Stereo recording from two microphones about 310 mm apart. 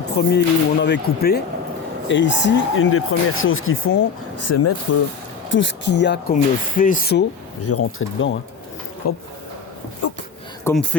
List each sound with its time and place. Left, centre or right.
0.2 s speech: left
4.4 s speech: left
5.5 s speech: left
7.6 s speech: left
9.0 s speech: left
10.6 s a man's voice: centre